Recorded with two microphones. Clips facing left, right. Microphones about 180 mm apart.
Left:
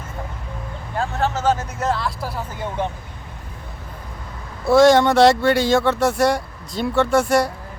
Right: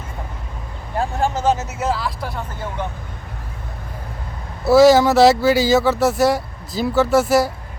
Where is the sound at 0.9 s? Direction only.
10° right (ahead or behind).